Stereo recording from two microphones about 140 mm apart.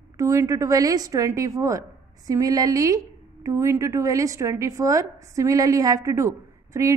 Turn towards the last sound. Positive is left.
turn(degrees=-20)  # may be behind; listen again after turning